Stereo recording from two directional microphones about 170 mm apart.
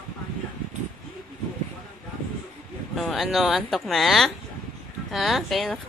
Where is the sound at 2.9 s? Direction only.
Centre (ahead or behind).